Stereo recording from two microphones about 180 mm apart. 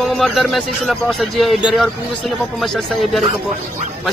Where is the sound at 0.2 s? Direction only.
Centre (ahead or behind).